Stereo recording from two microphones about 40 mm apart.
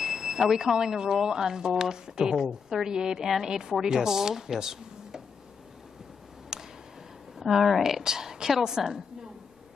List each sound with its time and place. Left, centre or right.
0.0 s speech: centre
6.5 s a sound: centre
7.3 s speech: centre